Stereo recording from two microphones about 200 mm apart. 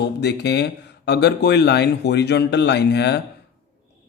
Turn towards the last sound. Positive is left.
turn(degrees=55)  # may be behind; listen again after turning